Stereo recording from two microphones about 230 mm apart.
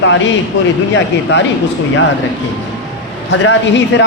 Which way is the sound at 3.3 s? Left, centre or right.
Left.